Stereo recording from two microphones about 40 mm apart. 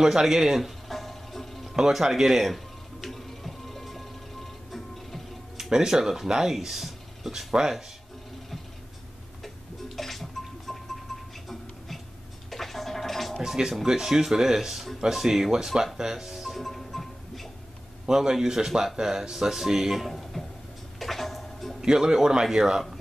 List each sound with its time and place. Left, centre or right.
0.0 s speech: centre
0.8 s music: centre
5.6 s speech: centre
9.4 s a sound: centre
10.7 s music: centre
12.4 s gargling: centre
13.4 s speech: centre
16.0 s music: centre
16.6 s music: centre
18.0 s speech: centre
18.9 s speech: centre
21.0 s music: centre
21.8 s speech: centre